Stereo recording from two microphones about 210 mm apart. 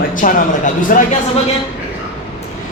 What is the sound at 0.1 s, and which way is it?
Speech, 40° left (ahead or behind).